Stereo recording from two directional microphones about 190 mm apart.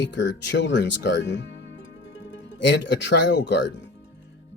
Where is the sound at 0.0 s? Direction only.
70° left (ahead or behind).